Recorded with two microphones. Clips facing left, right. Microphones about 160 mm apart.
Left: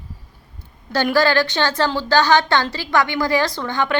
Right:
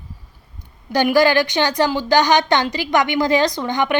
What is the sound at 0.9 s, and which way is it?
A woman's voice, 15° right (ahead or behind).